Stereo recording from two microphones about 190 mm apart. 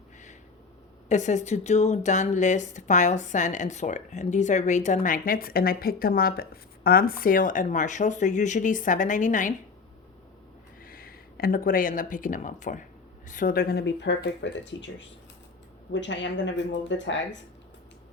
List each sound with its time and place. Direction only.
1.0 s speech: 40° left (ahead or behind)
10.8 s speech: 50° left (ahead or behind); by 17.4 s 70° left (ahead or behind)